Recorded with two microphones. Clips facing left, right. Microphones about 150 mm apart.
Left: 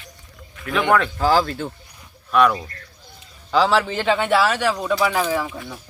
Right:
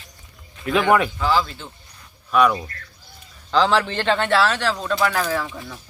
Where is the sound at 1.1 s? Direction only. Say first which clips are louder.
Left 3 dB; 45° left (ahead or behind).